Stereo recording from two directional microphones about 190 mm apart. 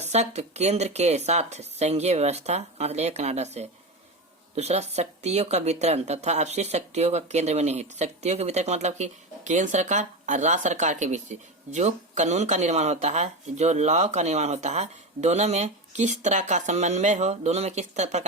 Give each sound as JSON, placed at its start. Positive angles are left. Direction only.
{"t": 0.0, "sound": "speech", "side_deg": -35}